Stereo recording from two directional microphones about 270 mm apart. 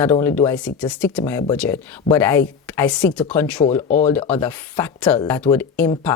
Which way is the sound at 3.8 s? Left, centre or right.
Left.